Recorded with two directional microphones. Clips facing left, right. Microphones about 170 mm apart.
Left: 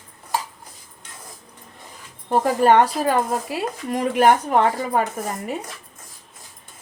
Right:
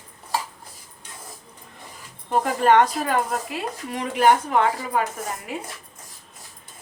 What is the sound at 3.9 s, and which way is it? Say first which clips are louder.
Speech: left 2 dB; 45° left (ahead or behind).